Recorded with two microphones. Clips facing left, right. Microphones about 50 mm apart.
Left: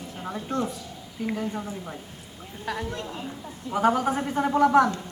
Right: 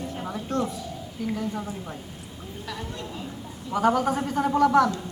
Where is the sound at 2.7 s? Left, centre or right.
Left.